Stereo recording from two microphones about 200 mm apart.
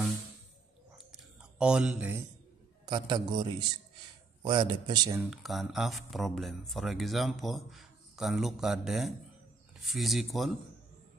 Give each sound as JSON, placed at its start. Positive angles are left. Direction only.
{"t": 0.9, "sound": "a sound", "side_deg": -5}
{"t": 2.8, "sound": "speech", "side_deg": -20}
{"t": 5.2, "sound": "speech", "side_deg": 0}